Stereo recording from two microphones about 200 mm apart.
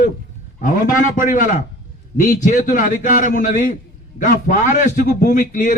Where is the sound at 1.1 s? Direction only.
40° left (ahead or behind).